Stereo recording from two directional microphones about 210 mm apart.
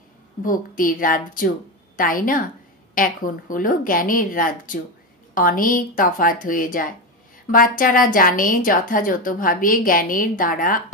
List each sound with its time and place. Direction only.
0.4 s a woman's voice: 40° left (ahead or behind)